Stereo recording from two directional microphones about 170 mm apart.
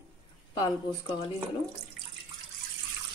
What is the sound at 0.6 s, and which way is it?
Speech, 25° left (ahead or behind).